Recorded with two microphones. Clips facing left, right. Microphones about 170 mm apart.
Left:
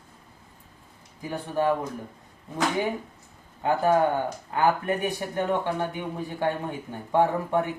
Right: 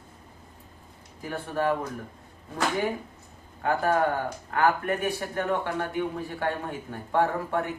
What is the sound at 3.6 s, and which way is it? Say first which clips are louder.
Speech: left 3 dB; 20° left (ahead or behind).